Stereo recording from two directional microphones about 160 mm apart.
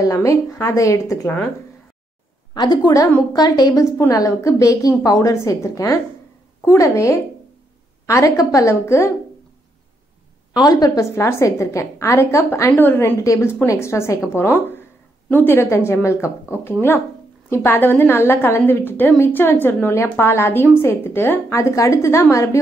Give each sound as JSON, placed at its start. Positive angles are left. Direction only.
{"t": 0.0, "sound": "a woman's voice", "side_deg": 20}
{"t": 2.5, "sound": "a woman's voice", "side_deg": 25}
{"t": 10.5, "sound": "a woman's voice", "side_deg": 25}